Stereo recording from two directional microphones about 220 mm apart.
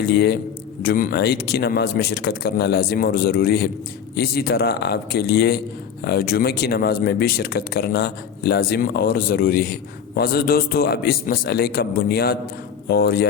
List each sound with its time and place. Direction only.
0.0 s speech: 50° left (ahead or behind)